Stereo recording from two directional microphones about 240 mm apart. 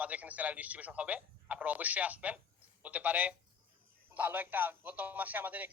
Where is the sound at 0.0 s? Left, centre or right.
Centre.